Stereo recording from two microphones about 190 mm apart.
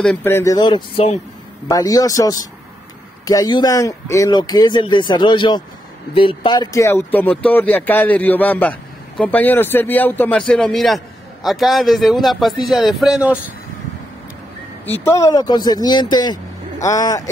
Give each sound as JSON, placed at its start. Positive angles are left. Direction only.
{"t": 0.0, "sound": "speech", "side_deg": 10}
{"t": 1.7, "sound": "a man's voice", "side_deg": 20}
{"t": 14.9, "sound": "speech", "side_deg": 10}